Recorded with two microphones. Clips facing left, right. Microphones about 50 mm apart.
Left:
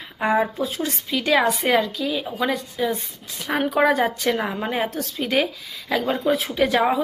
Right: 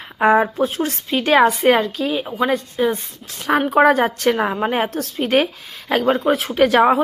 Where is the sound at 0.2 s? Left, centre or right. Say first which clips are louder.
Right 6 dB; right.